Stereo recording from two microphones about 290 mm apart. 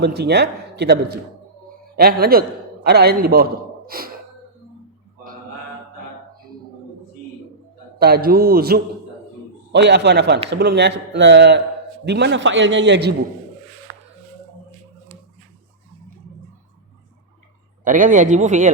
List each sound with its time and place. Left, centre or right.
0.2 s a man's voice: right
7.9 s a man's voice: right
17.8 s speech: right